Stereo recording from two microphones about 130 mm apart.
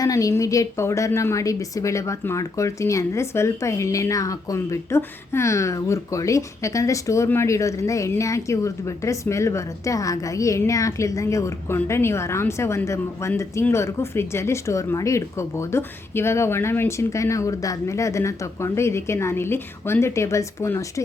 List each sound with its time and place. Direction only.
0.0 s a woman's voice: 25° left (ahead or behind)